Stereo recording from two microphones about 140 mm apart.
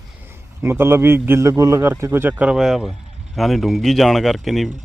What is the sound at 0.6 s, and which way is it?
A man's voice, 15° right (ahead or behind).